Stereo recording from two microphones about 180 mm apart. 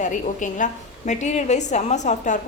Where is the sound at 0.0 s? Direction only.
45° left (ahead or behind).